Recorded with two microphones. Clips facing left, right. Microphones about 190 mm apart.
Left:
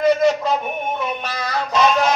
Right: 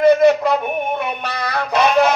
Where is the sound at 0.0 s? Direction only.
60° right (ahead or behind).